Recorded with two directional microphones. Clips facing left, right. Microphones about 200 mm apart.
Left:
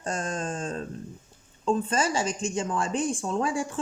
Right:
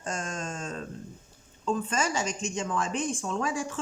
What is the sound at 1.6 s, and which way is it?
A woman's voice, 30° left (ahead or behind).